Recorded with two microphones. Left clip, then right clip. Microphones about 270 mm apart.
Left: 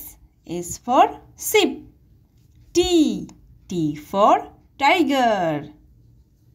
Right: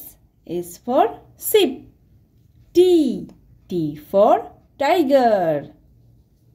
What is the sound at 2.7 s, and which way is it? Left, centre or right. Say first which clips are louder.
A woman's voice: right 3 dB; left.